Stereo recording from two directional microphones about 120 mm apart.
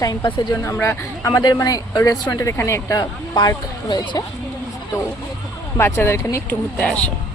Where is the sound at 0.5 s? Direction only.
20° left (ahead or behind); by 4.2 s 40° left (ahead or behind).